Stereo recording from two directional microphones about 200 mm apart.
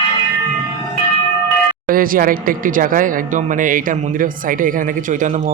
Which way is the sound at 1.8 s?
45° right (ahead or behind).